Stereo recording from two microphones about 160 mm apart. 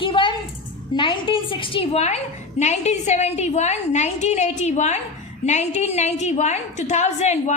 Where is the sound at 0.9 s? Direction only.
30° left (ahead or behind).